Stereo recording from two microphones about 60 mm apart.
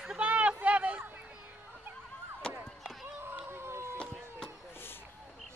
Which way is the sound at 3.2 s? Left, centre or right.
Right.